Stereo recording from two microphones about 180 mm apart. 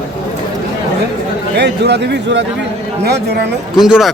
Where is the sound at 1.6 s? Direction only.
70° right (ahead or behind).